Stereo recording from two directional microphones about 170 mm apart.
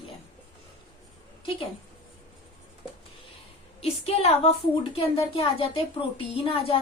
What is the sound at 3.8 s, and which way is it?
A woman's voice, 35° left (ahead or behind).